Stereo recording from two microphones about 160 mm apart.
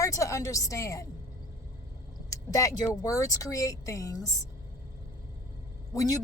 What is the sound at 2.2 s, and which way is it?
A woman's voice, 20° left (ahead or behind).